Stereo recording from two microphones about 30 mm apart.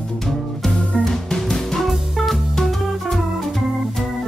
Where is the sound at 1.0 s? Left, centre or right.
Centre.